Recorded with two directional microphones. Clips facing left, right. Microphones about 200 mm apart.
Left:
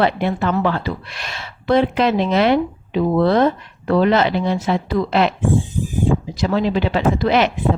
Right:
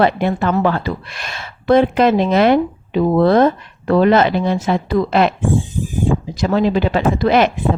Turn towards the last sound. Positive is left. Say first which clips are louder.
# right 2 dB
turn(degrees=-50)  # may be behind; listen again after turning